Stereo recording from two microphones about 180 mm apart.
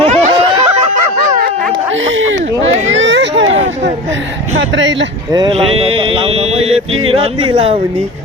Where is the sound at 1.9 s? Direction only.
90° right.